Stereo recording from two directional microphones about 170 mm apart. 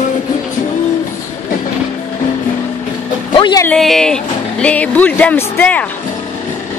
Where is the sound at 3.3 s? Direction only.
30° left (ahead or behind).